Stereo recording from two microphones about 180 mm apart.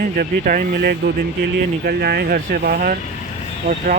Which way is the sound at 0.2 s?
50° right (ahead or behind).